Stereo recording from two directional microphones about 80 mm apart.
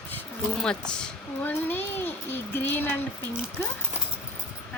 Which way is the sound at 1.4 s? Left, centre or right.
Left.